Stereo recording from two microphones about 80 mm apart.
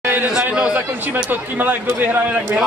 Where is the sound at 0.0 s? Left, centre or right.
Right.